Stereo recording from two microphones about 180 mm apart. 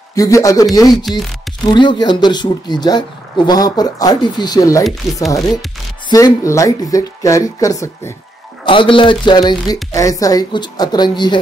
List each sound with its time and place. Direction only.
0.1 s speech: 15° left (ahead or behind)
1.1 s speech: centre (ahead or behind)
1.7 s speech: 25° left (ahead or behind)
4.8 s speech: centre (ahead or behind)
6.0 s speech: 20° left (ahead or behind)
8.6 s speech: 30° left (ahead or behind)